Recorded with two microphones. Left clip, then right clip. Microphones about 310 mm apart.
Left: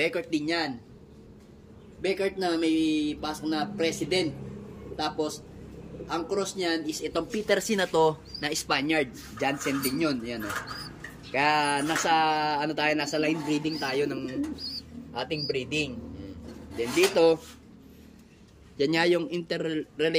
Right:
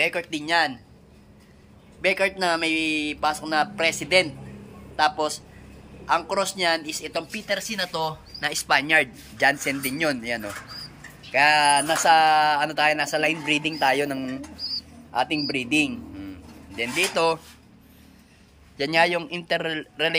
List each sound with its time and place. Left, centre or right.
0.0 s speech: centre
2.0 s speech: centre
9.7 s speech: right
9.9 s speech: centre
15.2 s a man's voice: centre
16.7 s speech: centre
18.8 s speech: centre